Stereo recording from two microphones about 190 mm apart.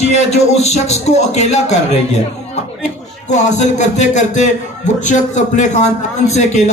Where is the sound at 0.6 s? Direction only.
35° left (ahead or behind).